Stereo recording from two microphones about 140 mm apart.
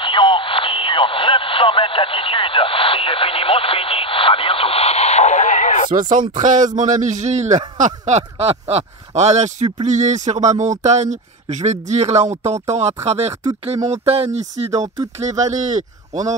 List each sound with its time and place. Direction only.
0.0 s radio: 40° left (ahead or behind); by 5.9 s 65° left (ahead or behind)
5.9 s speech: 65° right (ahead or behind); by 14.4 s 50° right (ahead or behind)
15.2 s speech: 60° right (ahead or behind)